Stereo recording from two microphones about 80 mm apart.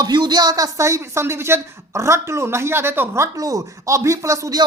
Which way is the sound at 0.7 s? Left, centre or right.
Right.